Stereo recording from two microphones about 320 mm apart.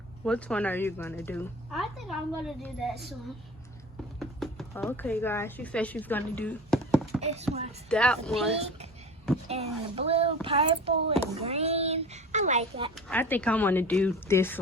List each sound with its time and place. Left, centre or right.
0.3 s speech: centre
4.2 s speech: centre
7.2 s speech: centre
7.9 s speech: centre
9.5 s speech: centre
13.1 s speech: centre